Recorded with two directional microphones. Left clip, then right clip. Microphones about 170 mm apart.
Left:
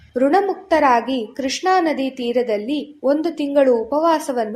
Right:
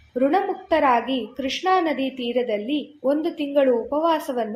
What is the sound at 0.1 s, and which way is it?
A woman's voice, 40° left (ahead or behind).